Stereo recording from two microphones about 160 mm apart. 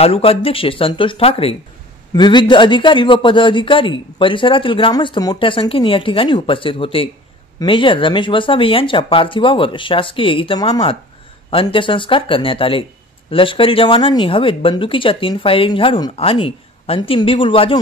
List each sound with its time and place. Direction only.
0.0 s speech: 35° left (ahead or behind)